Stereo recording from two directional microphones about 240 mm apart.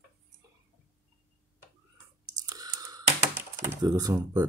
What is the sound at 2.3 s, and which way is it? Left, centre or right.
Speech, centre.